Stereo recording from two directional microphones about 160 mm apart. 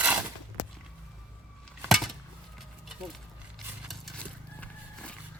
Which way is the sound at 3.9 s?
5° left (ahead or behind).